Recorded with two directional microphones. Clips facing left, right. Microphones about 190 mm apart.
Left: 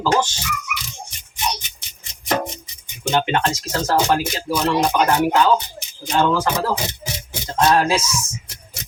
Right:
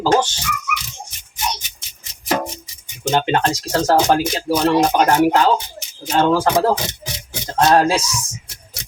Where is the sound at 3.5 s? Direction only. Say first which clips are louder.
Right 4 dB; 35° right (ahead or behind).